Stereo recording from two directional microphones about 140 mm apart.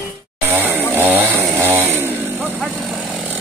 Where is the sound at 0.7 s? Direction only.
15° right (ahead or behind).